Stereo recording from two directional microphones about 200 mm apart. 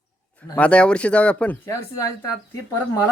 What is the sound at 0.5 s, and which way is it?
Speech, 5° left (ahead or behind).